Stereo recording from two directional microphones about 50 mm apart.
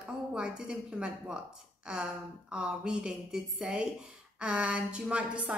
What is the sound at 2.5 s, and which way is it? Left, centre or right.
A woman's voice, centre.